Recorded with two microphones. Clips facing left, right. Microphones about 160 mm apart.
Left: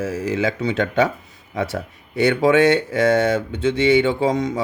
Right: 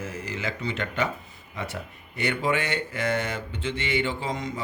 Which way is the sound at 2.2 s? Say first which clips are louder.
Left 12 dB; 85° left.